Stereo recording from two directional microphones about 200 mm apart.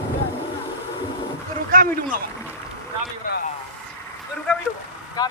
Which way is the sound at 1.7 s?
45° right (ahead or behind).